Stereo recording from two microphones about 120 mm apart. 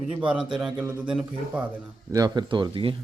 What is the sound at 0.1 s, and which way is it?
Speech, 10° right (ahead or behind).